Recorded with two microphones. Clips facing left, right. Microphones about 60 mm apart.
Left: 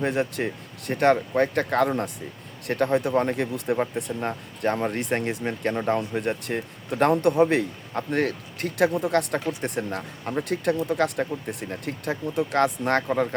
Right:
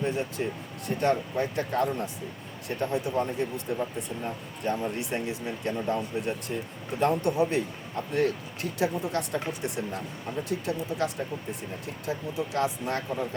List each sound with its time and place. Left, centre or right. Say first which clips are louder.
0.0 s speech: left 4 dB; left
9.6 s speech: left 4 dB; left